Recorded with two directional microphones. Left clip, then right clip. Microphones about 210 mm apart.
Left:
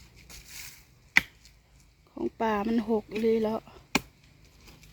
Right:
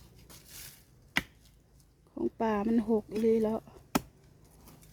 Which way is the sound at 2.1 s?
5° right (ahead or behind).